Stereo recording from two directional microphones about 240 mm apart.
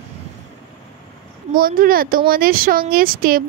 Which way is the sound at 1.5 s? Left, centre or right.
Right.